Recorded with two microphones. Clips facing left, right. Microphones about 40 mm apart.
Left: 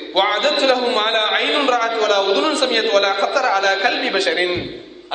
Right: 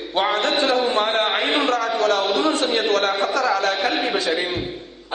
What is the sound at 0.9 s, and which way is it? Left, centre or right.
Speech, left.